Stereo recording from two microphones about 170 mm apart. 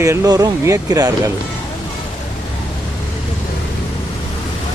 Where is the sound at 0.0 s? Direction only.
15° right (ahead or behind).